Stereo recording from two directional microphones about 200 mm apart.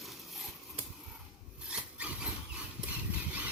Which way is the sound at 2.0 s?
5° right (ahead or behind).